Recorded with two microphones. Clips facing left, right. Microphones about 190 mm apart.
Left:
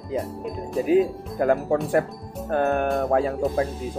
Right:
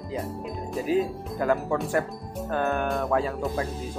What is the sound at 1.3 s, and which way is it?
Speech, 50° left (ahead or behind).